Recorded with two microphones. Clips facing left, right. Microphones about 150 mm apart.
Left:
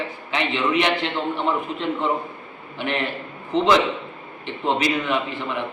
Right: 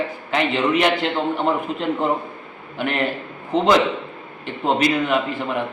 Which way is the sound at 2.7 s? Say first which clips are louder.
Right 3 dB; 45° right (ahead or behind).